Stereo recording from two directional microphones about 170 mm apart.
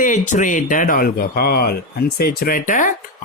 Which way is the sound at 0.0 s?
50° left (ahead or behind).